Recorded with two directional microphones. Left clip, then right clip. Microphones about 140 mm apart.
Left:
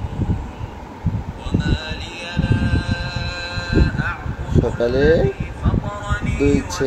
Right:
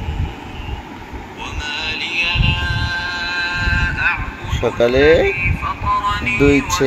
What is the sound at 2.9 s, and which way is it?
Music, 35° left (ahead or behind).